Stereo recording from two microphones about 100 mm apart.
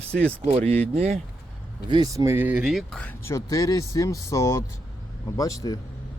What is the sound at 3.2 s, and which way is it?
Speech, 30° left (ahead or behind).